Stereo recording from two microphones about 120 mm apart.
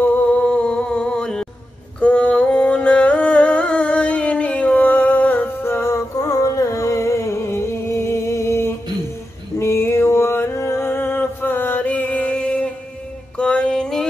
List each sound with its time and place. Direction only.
0.0 s music: 15° left (ahead or behind)
2.0 s a sound: 10° left (ahead or behind)
13.4 s music: 5° left (ahead or behind)